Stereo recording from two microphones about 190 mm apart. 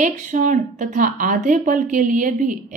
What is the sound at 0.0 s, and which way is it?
A woman's voice, 40° right (ahead or behind).